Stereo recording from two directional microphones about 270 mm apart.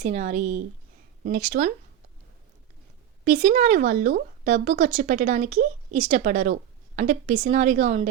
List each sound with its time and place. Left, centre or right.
0.0 s speech: right
3.2 s speech: right